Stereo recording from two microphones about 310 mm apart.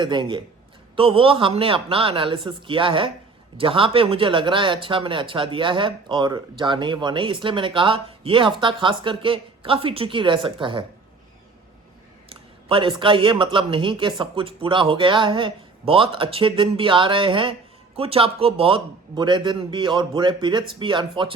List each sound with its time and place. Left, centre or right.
0.0 s speech: centre
12.3 s speech: centre